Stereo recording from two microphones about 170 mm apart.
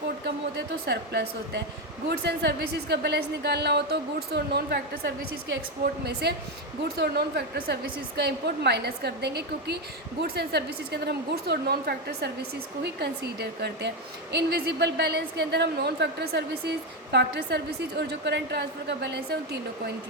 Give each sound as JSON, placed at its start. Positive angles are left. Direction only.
{"t": 0.5, "sound": "a woman's voice", "side_deg": -75}